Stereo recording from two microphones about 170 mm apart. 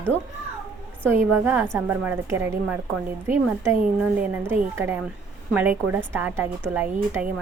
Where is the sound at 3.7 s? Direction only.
10° right (ahead or behind).